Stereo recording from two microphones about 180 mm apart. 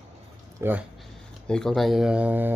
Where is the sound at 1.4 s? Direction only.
5° left (ahead or behind).